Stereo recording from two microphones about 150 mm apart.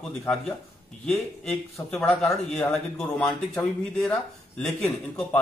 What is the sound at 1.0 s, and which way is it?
Speech, 5° left (ahead or behind).